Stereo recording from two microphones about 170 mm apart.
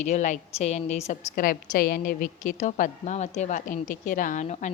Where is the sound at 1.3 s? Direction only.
60° left (ahead or behind).